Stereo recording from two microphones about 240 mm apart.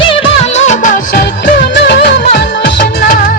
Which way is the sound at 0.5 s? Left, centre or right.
Left.